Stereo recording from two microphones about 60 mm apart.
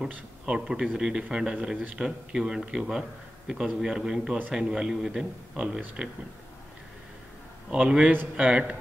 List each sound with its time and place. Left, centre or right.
0.0 s a man's voice: centre
7.7 s a man's voice: centre